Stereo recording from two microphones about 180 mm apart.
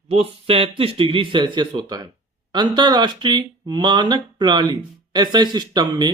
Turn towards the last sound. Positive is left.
turn(degrees=-25)  # may be behind; listen again after turning